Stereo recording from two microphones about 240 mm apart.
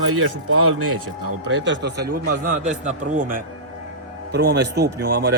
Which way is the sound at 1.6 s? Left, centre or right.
Right.